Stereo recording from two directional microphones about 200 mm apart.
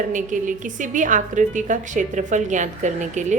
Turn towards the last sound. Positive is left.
turn(degrees=-40)  # may be behind; listen again after turning